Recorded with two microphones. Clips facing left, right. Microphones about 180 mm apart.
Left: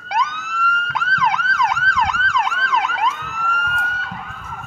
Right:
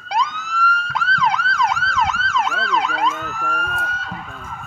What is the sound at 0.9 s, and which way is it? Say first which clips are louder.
Emergency vehicle: left 1 dB; centre (ahead or behind).